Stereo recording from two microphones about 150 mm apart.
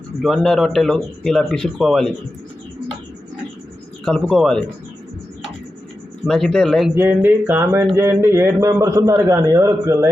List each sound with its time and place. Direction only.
0.2 s speech: 5° left (ahead or behind)
4.0 s speech: 5° left (ahead or behind)
6.2 s speech: centre (ahead or behind)
6.9 s a man's voice: 15° right (ahead or behind)